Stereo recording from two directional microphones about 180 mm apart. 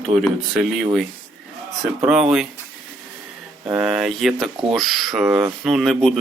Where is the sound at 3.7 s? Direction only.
5° right (ahead or behind).